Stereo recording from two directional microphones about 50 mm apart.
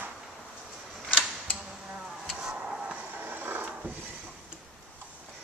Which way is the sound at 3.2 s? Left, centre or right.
Right.